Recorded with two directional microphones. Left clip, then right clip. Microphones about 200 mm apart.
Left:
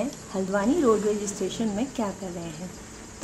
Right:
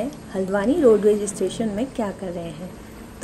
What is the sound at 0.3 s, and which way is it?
Speech, 10° right (ahead or behind).